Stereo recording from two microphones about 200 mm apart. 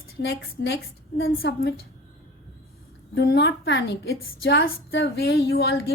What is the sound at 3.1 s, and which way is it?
A woman's voice, 55° left (ahead or behind).